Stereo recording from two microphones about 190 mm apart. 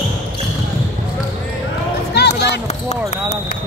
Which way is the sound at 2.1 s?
60° left (ahead or behind).